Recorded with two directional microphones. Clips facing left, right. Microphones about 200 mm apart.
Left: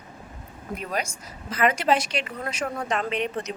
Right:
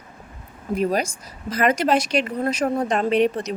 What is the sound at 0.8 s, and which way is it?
Speech, 35° right (ahead or behind).